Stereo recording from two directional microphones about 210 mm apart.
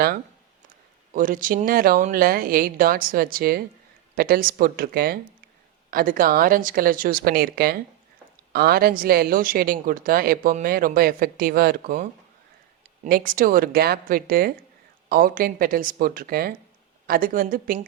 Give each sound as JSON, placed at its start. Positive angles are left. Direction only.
{"t": 1.1, "sound": "a woman's voice", "side_deg": -40}
{"t": 13.1, "sound": "a woman's voice", "side_deg": -45}